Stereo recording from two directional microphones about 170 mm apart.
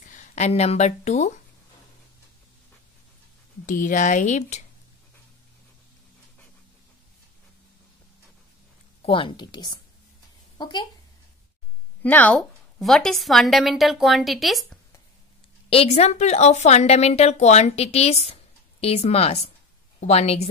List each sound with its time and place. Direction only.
0.0 s speech: 45° left (ahead or behind)
3.6 s speech: 50° left (ahead or behind)
9.0 s speech: 30° left (ahead or behind)
12.0 s a woman's voice: 10° left (ahead or behind)
15.7 s a woman's voice: 35° left (ahead or behind)